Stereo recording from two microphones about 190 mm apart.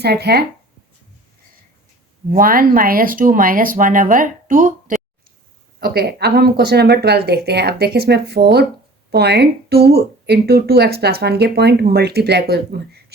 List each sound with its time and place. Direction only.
0.0 s speech: 60° right (ahead or behind)
2.3 s speech: 50° right (ahead or behind)
5.8 s speech: 55° right (ahead or behind)